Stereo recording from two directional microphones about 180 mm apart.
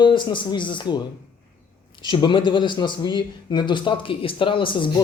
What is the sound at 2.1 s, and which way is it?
A man's voice, 25° left (ahead or behind).